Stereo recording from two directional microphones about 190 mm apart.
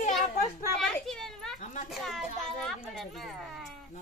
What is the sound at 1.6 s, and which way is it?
Speech, 40° left (ahead or behind).